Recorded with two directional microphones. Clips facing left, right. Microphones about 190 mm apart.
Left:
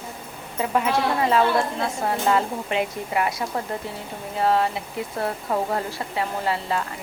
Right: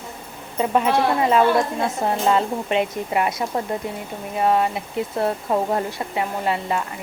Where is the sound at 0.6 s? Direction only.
25° right (ahead or behind).